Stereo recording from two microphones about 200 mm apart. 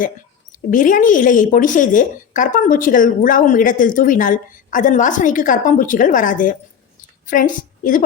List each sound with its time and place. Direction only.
0.7 s a woman's voice: 40° left (ahead or behind)